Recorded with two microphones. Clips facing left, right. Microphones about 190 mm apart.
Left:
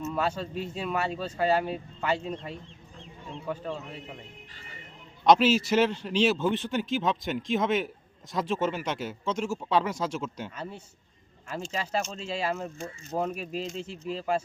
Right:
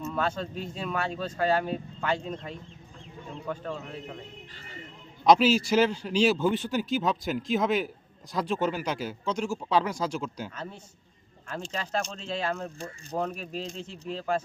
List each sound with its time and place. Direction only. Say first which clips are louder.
0.0 s a man's voice: even; 5° left (ahead or behind)
5.2 s a man's voice: even; centre (ahead or behind)